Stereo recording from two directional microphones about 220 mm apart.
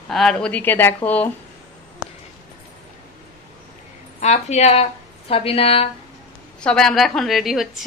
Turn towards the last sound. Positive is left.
turn(degrees=0)  # may be behind; listen again after turning